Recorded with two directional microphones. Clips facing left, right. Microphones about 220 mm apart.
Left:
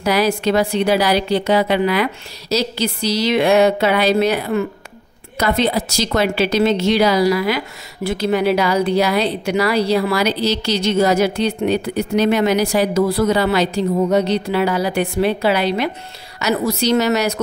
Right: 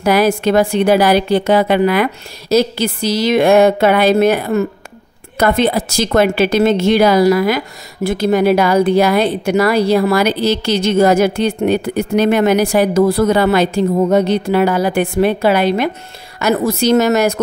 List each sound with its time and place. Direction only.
0.0 s a woman's voice: 50° right (ahead or behind)